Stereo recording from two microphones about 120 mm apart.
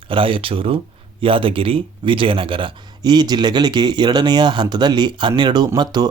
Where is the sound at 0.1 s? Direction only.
45° right (ahead or behind).